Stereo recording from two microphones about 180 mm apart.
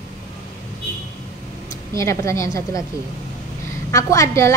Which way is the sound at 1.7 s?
15° left (ahead or behind).